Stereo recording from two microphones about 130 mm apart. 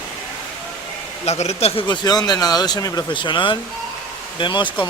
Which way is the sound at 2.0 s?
30° left (ahead or behind).